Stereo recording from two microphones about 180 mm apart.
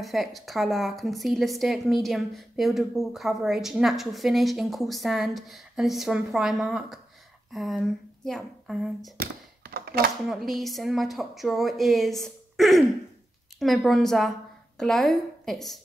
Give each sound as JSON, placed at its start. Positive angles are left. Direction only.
{"t": 0.0, "sound": "a woman's voice", "side_deg": 0}
{"t": 9.1, "sound": "a sound", "side_deg": -60}
{"t": 10.2, "sound": "a woman's voice", "side_deg": 0}